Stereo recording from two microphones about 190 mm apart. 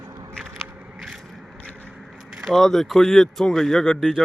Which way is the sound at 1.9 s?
Centre (ahead or behind).